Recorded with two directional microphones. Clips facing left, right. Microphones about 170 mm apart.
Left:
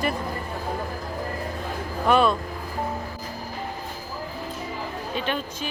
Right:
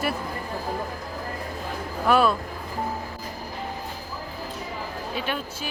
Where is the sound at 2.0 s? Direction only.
5° right (ahead or behind).